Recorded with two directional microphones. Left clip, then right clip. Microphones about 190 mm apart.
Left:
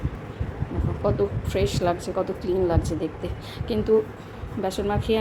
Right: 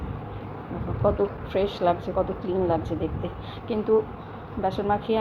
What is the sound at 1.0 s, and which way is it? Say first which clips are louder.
A woman's voice: right 1 dB; 25° left (ahead or behind).